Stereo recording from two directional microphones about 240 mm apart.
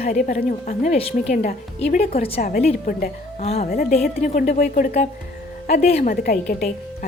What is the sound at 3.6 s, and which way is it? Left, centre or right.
A woman's voice, left.